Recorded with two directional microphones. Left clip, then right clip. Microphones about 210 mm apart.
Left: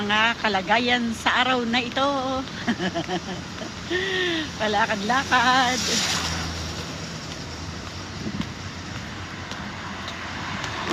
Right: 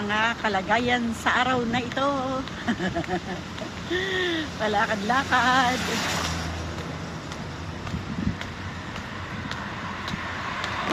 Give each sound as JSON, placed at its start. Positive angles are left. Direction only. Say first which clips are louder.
{"t": 0.1, "sound": "speech", "louder": "left 3 dB", "side_deg": 25}
{"t": 3.9, "sound": "speech", "louder": "left 2 dB", "side_deg": 15}